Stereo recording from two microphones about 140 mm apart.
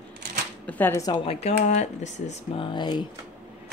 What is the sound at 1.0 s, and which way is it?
Speech, 35° left (ahead or behind).